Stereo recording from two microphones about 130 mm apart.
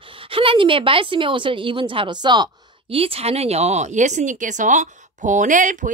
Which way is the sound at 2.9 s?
50° right (ahead or behind).